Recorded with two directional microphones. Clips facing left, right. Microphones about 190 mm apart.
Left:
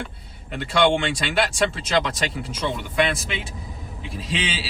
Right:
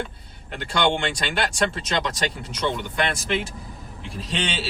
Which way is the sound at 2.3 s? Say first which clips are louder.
Even; centre (ahead or behind).